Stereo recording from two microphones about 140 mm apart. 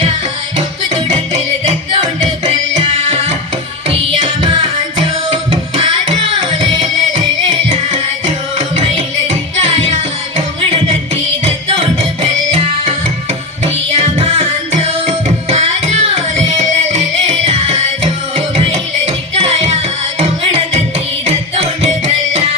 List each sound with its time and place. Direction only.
1.9 s music: 40° right (ahead or behind)
13.9 s music: 50° right (ahead or behind)